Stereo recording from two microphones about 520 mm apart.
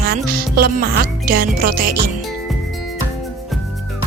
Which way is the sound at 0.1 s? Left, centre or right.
Centre.